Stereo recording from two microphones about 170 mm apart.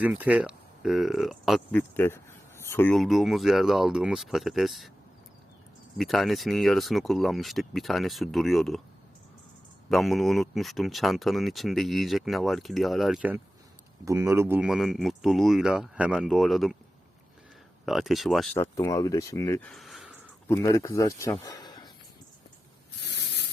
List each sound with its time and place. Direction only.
0.0 s speech: 10° right (ahead or behind)
2.0 s a sound: 15° left (ahead or behind)
2.9 s speech: centre (ahead or behind)
6.0 s speech: centre (ahead or behind)
9.9 s speech: centre (ahead or behind)
14.0 s speech: 15° right (ahead or behind); by 16.7 s centre (ahead or behind)
17.8 s speech: centre (ahead or behind)
18.5 s speech: 15° left (ahead or behind)
19.7 s a sound: centre (ahead or behind)
20.5 s speech: 20° left (ahead or behind)
21.4 s a sound: 20° left (ahead or behind)
23.0 s spray: 80° left